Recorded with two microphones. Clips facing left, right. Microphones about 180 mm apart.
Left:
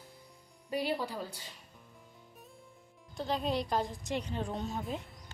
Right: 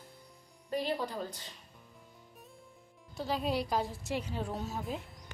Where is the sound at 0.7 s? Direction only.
10° left (ahead or behind).